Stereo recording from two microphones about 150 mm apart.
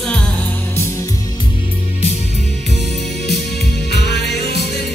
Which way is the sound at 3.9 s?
90° left.